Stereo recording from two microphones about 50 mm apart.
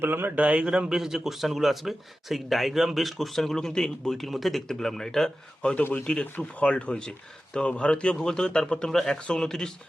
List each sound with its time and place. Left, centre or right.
0.0 s a man's voice: right
0.3 s a man's voice: right
0.9 s speech: centre
4.2 s speech: centre